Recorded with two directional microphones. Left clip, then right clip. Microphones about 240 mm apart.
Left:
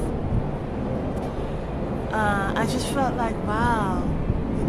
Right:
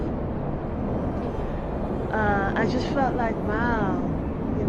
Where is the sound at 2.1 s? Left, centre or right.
Centre.